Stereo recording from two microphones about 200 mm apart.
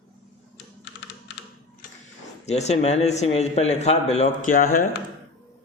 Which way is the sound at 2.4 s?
35° left (ahead or behind).